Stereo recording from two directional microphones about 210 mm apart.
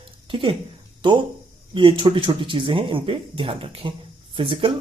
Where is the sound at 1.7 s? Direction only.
25° right (ahead or behind).